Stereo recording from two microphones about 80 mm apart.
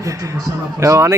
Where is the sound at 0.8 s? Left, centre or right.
Right.